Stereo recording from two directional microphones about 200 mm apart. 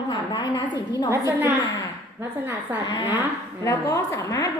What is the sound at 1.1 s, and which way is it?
A woman's voice, 10° right (ahead or behind).